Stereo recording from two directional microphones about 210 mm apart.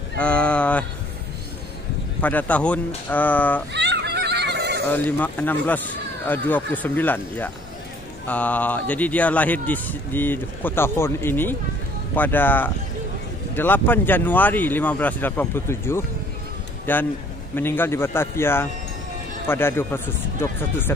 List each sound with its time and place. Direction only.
0.2 s speech: 5° left (ahead or behind)
2.2 s speech: 5° left (ahead or behind)
3.7 s goat: 55° right (ahead or behind)
5.2 s speech: 10° left (ahead or behind)